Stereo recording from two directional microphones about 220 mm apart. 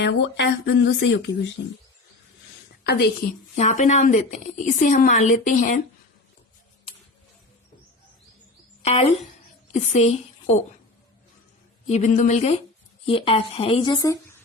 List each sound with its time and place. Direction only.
0.0 s speech: 50° left (ahead or behind)
2.8 s a woman's voice: 50° left (ahead or behind)
3.5 s a woman's voice: 35° left (ahead or behind)
8.8 s a woman's voice: 30° left (ahead or behind)
11.9 s a woman's voice: 35° left (ahead or behind); by 14.3 s 15° left (ahead or behind)